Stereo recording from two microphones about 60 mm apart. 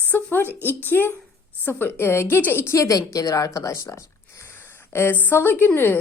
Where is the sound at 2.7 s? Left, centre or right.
Left.